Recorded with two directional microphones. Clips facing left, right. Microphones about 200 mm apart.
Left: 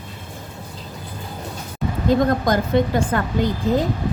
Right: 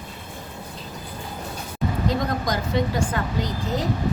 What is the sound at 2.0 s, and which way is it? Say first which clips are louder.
Speech: left 9 dB; 55° left (ahead or behind).